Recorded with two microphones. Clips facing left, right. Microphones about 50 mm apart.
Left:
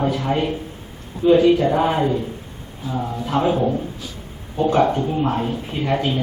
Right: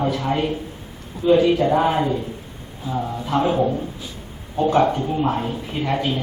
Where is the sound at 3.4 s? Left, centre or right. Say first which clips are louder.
Left 1 dB; centre.